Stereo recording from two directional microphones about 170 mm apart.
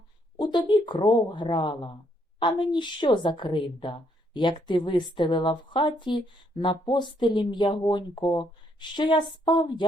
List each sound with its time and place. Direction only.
0.3 s a woman's voice: 25° left (ahead or behind)